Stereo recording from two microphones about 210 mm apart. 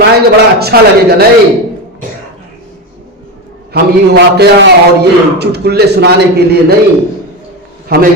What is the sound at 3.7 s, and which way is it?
A man's voice, 50° right (ahead or behind).